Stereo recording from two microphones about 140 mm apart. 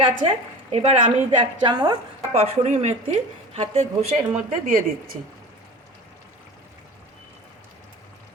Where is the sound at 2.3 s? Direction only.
50° right (ahead or behind).